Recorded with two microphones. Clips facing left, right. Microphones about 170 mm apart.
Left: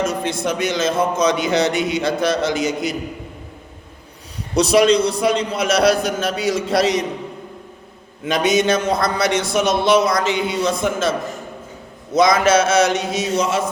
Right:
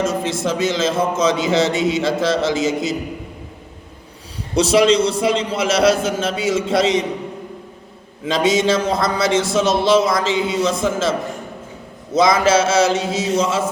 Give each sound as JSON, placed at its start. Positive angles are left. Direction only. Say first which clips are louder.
{"t": 0.0, "sound": "speech", "louder": "right 1 dB", "side_deg": -25}
{"t": 4.5, "sound": "speech", "louder": "even", "side_deg": -30}
{"t": 8.2, "sound": "speech", "louder": "even", "side_deg": -25}
{"t": 12.1, "sound": "speech", "louder": "even", "side_deg": -30}